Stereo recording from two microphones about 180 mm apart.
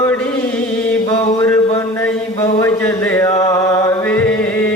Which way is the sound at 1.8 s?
15° left (ahead or behind).